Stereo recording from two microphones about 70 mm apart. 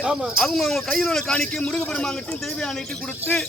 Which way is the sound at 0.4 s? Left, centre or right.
Centre.